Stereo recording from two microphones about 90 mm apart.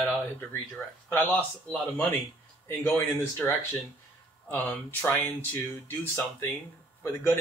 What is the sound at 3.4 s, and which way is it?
Speech, 15° left (ahead or behind).